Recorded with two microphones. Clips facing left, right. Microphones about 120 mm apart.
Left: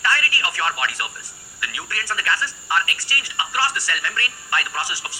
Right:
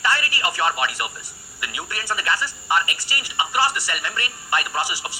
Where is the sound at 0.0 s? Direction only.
20° right (ahead or behind).